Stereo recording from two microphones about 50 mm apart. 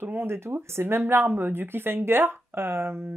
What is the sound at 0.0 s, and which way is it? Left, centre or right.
Speech, right.